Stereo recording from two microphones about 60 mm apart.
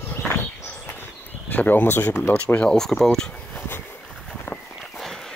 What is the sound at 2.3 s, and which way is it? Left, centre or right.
Speech, left.